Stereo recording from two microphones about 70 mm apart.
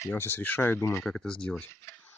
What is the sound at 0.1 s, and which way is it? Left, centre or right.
Speech, left.